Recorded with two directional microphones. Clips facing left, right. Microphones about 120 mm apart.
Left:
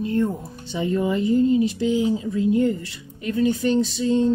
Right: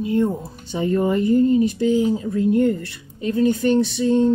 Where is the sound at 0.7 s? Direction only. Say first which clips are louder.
Right 3 dB; 45° right (ahead or behind).